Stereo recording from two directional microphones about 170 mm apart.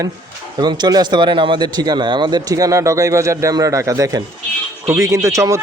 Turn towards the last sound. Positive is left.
turn(degrees=-20)  # may be behind; listen again after turning